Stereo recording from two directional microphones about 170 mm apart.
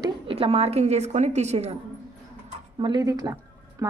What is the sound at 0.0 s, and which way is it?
A woman's voice, 30° right (ahead or behind).